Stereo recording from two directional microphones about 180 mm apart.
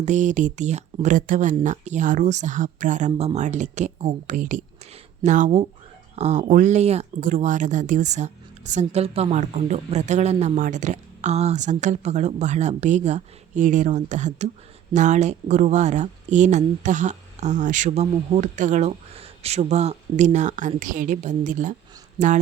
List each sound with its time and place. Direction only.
0.0 s a woman's voice: 45° right (ahead or behind)
7.2 s a woman's voice: 50° right (ahead or behind)